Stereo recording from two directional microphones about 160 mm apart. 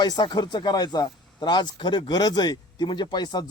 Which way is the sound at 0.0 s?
25° left (ahead or behind).